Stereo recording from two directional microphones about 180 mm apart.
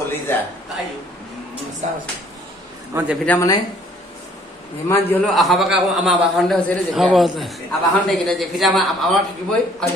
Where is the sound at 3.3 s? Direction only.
15° left (ahead or behind).